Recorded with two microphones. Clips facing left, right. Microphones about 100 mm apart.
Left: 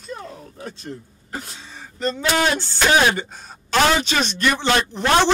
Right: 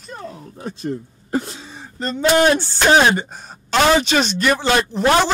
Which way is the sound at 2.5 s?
35° right (ahead or behind).